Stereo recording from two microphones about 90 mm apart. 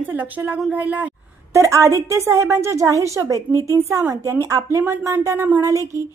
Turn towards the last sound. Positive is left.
turn(degrees=-35)  # may be behind; listen again after turning